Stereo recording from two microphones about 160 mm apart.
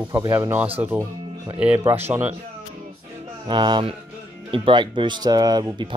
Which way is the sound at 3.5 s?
25° right (ahead or behind).